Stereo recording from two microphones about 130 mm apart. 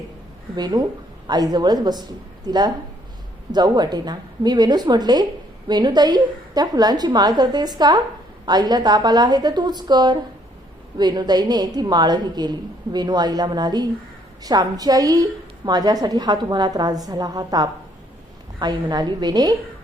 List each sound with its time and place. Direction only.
0.5 s a woman's voice: 30° right (ahead or behind)